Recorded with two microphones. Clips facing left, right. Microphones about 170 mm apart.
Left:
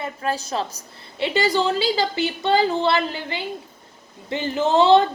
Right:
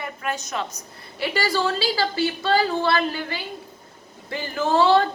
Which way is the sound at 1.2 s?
20° left (ahead or behind).